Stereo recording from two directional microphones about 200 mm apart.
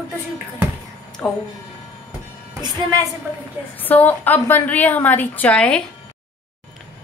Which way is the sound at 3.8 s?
10° left (ahead or behind).